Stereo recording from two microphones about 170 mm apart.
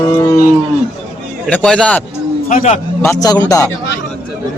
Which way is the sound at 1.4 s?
5° left (ahead or behind).